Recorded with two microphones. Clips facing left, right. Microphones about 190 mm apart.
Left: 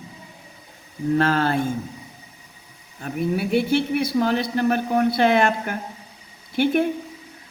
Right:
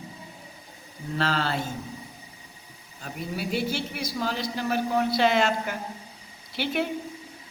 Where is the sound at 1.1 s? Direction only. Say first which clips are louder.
Left 7 dB; 55° left (ahead or behind).